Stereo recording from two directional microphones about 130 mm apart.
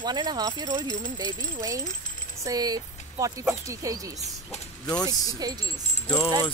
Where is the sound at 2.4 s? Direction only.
30° right (ahead or behind).